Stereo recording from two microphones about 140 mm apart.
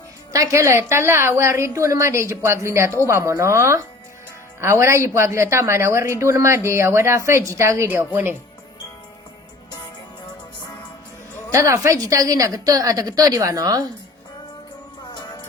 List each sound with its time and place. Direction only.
0.3 s a woman's voice: 20° right (ahead or behind)
11.5 s a woman's voice: 20° right (ahead or behind)